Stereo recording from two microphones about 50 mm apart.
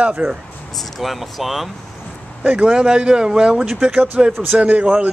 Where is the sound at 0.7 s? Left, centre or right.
Centre.